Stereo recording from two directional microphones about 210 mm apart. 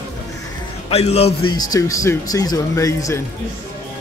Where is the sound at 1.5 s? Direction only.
15° left (ahead or behind).